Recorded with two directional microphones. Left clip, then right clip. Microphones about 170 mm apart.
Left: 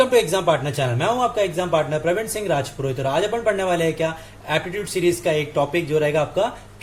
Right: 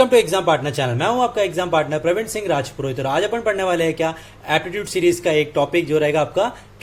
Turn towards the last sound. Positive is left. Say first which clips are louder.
# right 2 dB
turn(degrees=-40)  # may be behind; listen again after turning